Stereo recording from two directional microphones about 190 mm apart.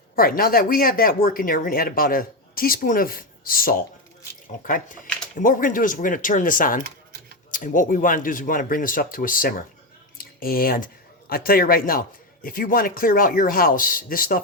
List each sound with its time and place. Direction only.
0.2 s speech: 50° left (ahead or behind)
10.2 s clicking: 50° left (ahead or behind)
11.3 s speech: 50° left (ahead or behind)